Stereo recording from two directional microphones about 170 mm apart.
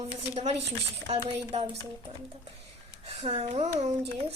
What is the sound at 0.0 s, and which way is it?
Speech, 40° right (ahead or behind).